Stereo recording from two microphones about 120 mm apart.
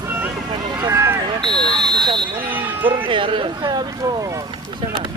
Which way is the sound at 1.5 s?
40° right (ahead or behind).